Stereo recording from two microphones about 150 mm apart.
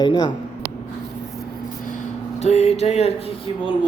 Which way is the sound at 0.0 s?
30° left (ahead or behind).